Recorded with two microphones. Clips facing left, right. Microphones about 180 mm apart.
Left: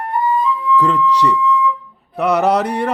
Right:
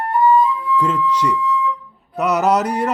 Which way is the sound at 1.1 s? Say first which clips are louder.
Left 4 dB; 35° left (ahead or behind).